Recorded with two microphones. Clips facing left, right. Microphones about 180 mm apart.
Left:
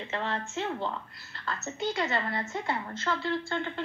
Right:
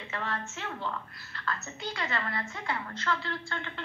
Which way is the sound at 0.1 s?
25° left (ahead or behind).